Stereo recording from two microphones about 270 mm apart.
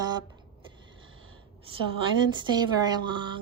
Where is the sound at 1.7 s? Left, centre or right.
Centre.